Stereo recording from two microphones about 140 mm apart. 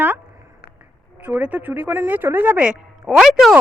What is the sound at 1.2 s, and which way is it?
A woman's voice, 10° right (ahead or behind).